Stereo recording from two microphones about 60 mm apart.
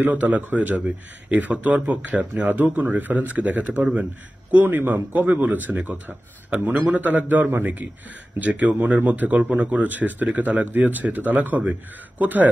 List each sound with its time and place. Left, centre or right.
0.0 s a man's voice: right
5.4 s a man's voice: right